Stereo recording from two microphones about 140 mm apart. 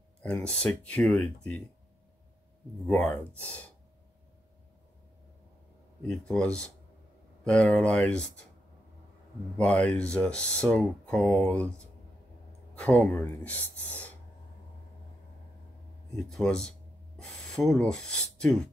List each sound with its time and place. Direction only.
0.2 s speech: 10° left (ahead or behind)
2.9 s speech: 15° left (ahead or behind)
6.0 s speech: 5° left (ahead or behind)
9.6 s speech: 10° left (ahead or behind)
12.7 s speech: 10° left (ahead or behind)
16.3 s speech: 5° left (ahead or behind)